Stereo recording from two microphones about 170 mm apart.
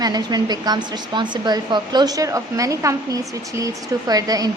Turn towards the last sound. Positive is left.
turn(degrees=-20)  # may be behind; listen again after turning